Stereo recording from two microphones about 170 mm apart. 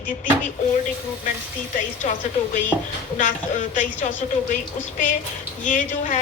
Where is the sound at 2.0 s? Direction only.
50° left (ahead or behind).